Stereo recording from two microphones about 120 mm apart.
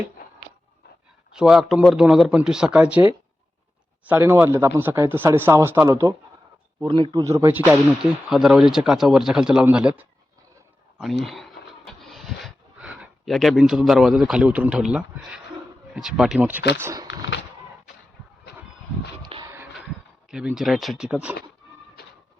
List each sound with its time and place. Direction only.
1.3 s speech: 5° right (ahead or behind); by 6.1 s 25° right (ahead or behind)
6.8 s speech: 45° right (ahead or behind)
7.2 s speech: 25° right (ahead or behind)
8.3 s a man's voice: 5° right (ahead or behind)
10.9 s speech: centre (ahead or behind); by 16.9 s 15° right (ahead or behind)
19.2 s a sound: 40° right (ahead or behind)
20.3 s speech: 5° right (ahead or behind)